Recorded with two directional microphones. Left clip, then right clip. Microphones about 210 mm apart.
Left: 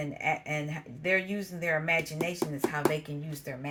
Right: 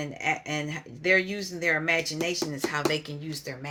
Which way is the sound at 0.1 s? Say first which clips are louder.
Right 2 dB; 35° right (ahead or behind).